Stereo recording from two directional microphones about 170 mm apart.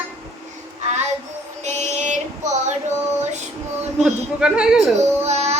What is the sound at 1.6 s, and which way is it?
Female singing, 45° right (ahead or behind).